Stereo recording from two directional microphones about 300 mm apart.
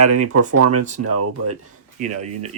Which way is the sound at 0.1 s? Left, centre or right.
Right.